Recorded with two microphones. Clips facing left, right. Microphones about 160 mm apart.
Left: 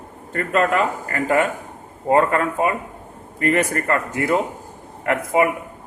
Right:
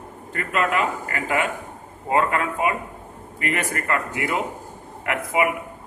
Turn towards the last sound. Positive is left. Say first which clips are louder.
# left 4 dB
turn(degrees=40)  # may be behind; listen again after turning